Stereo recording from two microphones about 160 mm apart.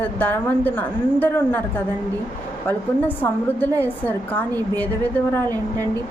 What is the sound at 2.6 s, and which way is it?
A woman's voice, 10° left (ahead or behind).